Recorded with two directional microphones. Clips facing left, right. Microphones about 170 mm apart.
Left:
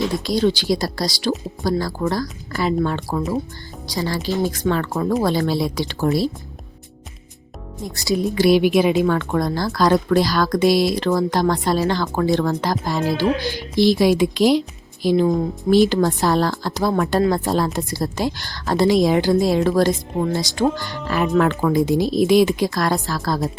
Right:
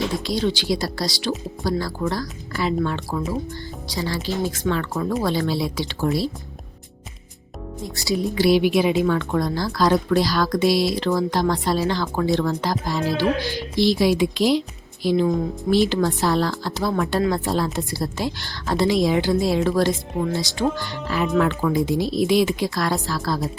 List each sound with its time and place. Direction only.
0.3 s speech: 40° left (ahead or behind)
8.4 s speech: 50° left (ahead or behind)